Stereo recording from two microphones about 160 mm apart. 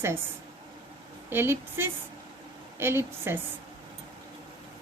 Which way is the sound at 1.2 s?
15° right (ahead or behind).